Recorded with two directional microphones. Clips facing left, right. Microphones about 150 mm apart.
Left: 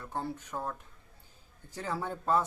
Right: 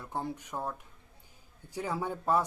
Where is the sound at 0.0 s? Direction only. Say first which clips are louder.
Even; 15° right (ahead or behind).